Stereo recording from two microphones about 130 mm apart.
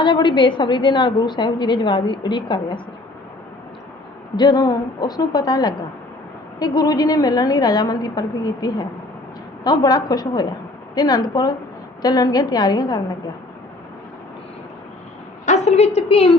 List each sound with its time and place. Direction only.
0.0 s a woman's voice: 40° left (ahead or behind)
4.4 s a woman's voice: 30° left (ahead or behind)
15.4 s a woman's voice: 60° left (ahead or behind)